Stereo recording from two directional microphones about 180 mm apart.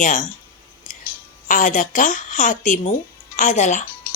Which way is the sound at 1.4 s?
45° left (ahead or behind).